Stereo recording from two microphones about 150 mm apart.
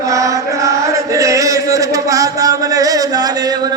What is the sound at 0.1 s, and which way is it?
Chant, 20° right (ahead or behind).